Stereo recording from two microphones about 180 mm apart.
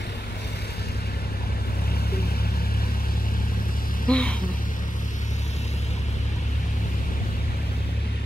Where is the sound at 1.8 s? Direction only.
60° left (ahead or behind).